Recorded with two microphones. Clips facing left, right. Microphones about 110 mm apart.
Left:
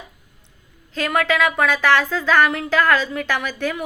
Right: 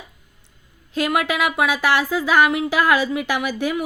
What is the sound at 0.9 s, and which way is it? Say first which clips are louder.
Speech: left 1 dB; 10° right (ahead or behind).